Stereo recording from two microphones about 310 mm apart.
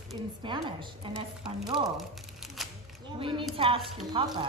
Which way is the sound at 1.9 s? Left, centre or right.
Centre.